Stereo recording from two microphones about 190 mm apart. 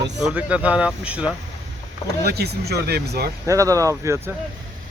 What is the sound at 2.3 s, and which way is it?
Speech, 55° right (ahead or behind).